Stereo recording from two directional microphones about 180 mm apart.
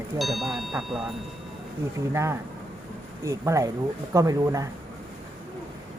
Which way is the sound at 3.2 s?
15° right (ahead or behind).